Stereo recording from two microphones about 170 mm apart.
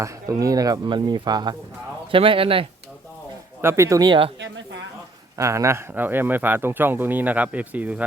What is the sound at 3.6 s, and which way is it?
Speech, 15° right (ahead or behind).